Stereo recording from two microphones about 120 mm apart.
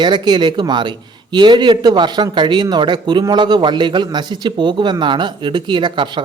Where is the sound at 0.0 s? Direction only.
40° right (ahead or behind).